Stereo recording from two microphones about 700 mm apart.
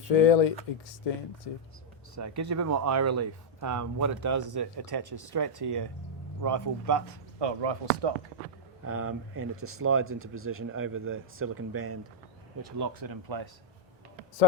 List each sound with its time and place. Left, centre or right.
0.1 s speech: left
2.1 s speech: right
7.3 s speech: right
8.9 s speech: centre